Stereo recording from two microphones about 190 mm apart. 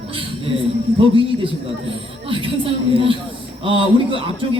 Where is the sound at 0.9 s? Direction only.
25° right (ahead or behind).